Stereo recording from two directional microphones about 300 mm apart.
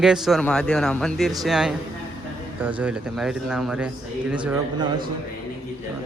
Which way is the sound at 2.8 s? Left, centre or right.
Centre.